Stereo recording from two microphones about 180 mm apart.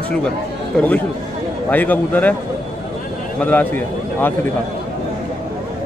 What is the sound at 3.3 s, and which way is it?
Speech, 10° left (ahead or behind).